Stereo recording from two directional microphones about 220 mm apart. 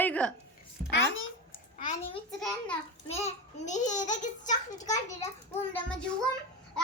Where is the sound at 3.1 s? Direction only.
30° left (ahead or behind).